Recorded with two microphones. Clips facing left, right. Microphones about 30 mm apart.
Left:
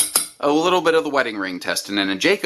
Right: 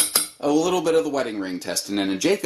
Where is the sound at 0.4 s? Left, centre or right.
Left.